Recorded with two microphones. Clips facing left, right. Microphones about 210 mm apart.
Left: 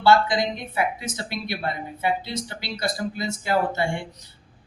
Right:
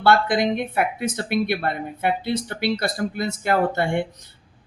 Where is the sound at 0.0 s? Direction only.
55° right (ahead or behind).